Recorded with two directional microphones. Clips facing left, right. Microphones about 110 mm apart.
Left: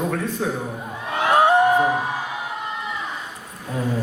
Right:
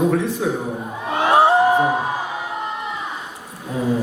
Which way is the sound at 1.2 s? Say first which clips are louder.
Right 2 dB; 30° right (ahead or behind).